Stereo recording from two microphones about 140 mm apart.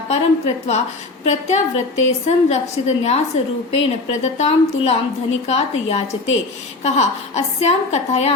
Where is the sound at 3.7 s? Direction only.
50° left (ahead or behind).